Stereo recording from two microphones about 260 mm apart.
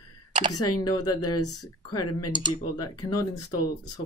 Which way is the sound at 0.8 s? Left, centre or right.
Centre.